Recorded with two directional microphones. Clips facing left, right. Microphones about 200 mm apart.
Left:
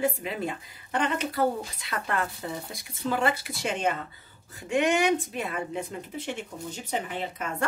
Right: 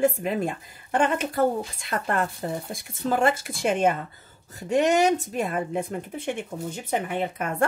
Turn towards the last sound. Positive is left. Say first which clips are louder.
# right 5 dB
turn(degrees=-55)  # may be behind; listen again after turning